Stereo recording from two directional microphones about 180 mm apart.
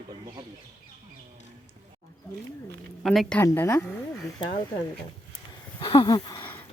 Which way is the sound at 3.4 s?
15° left (ahead or behind).